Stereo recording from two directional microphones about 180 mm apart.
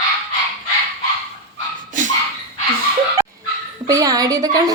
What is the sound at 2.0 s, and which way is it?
Dog, 45° right (ahead or behind).